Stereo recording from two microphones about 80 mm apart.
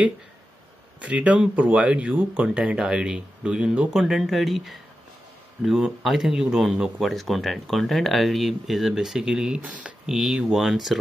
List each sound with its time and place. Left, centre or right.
1.0 s speech: centre
9.6 s speech: centre
10.0 s speech: centre